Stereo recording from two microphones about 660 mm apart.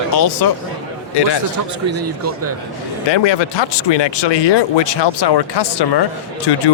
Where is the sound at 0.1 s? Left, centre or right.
Left.